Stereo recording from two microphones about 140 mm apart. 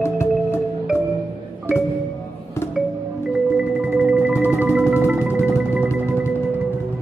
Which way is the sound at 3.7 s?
10° right (ahead or behind).